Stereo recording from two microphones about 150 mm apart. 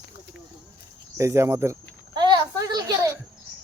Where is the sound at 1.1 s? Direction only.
20° right (ahead or behind).